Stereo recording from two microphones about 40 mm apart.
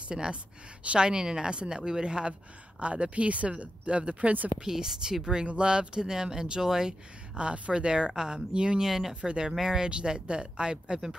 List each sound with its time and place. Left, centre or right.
0.1 s speech: right
4.6 s speech: centre
7.3 s speech: right
8.8 s speech: centre
9.1 s speech: right